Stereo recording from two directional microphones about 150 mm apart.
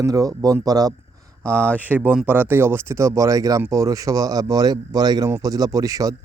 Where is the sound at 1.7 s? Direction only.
10° right (ahead or behind).